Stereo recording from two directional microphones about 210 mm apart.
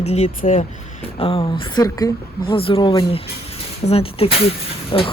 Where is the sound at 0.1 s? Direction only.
30° left (ahead or behind).